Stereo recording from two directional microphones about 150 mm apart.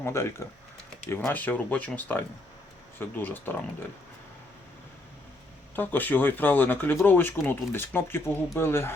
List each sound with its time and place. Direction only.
0.0 s speech: 15° left (ahead or behind)
5.7 s speech: 10° left (ahead or behind)